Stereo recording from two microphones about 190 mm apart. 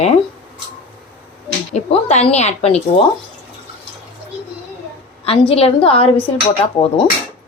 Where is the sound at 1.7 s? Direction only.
35° left (ahead or behind).